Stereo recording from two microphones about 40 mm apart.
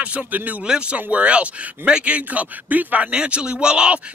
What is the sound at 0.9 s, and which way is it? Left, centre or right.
Speech, right.